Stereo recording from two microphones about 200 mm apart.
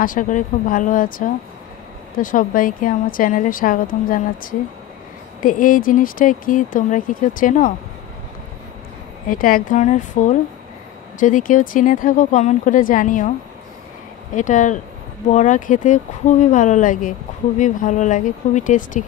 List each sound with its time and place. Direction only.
0.0 s a woman's voice: 40° left (ahead or behind)
9.3 s speech: 45° left (ahead or behind)
14.3 s speech: 40° left (ahead or behind)